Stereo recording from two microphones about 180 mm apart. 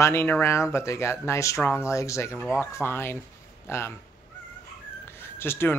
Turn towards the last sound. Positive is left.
turn(degrees=15)  # may be behind; listen again after turning